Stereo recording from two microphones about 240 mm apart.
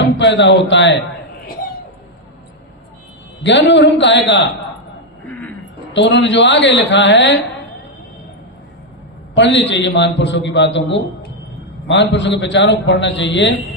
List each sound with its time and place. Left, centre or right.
0.0 s a man's voice: left
3.4 s a man's voice: left
5.3 s music: centre
5.9 s a man's voice: left
9.3 s a man's voice: left